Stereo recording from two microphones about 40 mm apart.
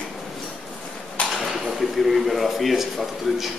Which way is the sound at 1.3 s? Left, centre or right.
Centre.